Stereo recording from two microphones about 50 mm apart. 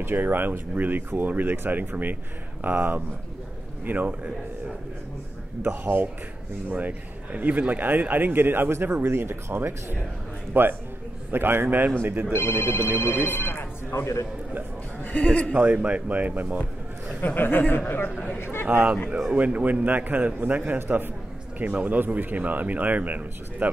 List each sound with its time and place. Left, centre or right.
0.0 s speech: right
5.7 s speech: right
6.7 s speech: right
12.3 s speech: left
13.9 s a man's voice: left
15.1 s a man's voice: left
15.5 s speech: right
17.2 s speech: left
18.4 s a man's voice: left
19.3 s speech: right